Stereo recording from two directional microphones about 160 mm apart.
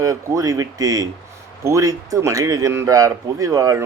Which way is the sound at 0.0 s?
20° right (ahead or behind).